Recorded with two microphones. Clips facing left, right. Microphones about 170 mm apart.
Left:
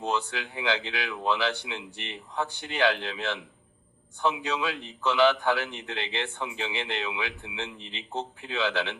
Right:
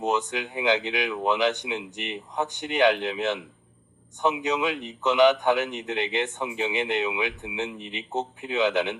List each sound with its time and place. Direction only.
0.0 s a man's voice: 20° right (ahead or behind)